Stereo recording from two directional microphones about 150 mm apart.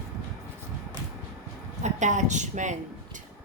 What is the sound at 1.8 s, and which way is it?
Speech, 55° right (ahead or behind).